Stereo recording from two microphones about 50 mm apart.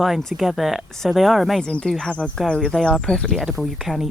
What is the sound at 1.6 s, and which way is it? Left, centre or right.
Speech, centre.